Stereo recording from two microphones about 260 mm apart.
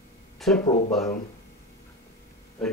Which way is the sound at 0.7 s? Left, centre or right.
Left.